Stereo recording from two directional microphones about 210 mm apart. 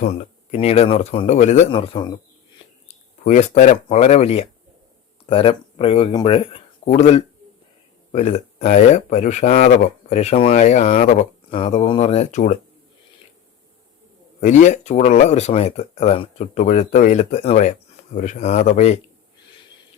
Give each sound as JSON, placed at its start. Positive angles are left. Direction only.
{"t": 0.5, "sound": "speech", "side_deg": 30}
{"t": 2.8, "sound": "speech", "side_deg": 35}
{"t": 14.4, "sound": "speech", "side_deg": 35}